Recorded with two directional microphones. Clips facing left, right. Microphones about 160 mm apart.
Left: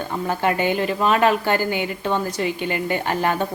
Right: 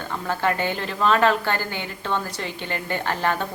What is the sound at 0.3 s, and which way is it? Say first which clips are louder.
Speech: left 3 dB; 15° left (ahead or behind).